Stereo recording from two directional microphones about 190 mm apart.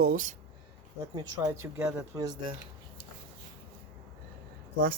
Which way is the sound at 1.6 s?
15° right (ahead or behind).